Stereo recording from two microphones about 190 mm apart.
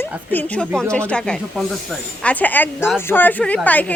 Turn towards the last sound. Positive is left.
turn(degrees=10)  # may be behind; listen again after turning